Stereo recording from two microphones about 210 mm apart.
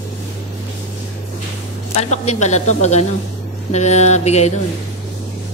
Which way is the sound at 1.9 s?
30° left (ahead or behind).